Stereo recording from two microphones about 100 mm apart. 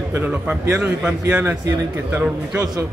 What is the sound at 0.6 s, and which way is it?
A man's voice, 25° right (ahead or behind).